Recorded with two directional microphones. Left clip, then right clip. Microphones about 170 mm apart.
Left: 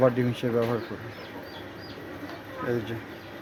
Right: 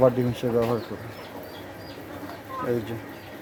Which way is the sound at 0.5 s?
10° right (ahead or behind).